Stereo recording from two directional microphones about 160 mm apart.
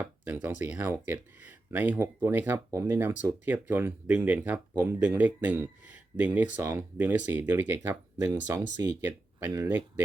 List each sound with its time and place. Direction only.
0.0 s speech: 10° right (ahead or behind)